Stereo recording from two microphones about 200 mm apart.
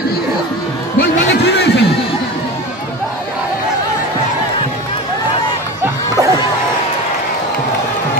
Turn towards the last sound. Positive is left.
turn(degrees=-15)  # may be behind; listen again after turning